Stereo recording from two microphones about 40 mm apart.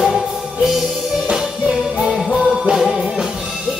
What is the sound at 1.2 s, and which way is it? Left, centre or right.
Music, centre.